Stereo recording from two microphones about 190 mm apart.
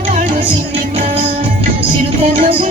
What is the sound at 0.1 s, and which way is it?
Music, 45° right (ahead or behind).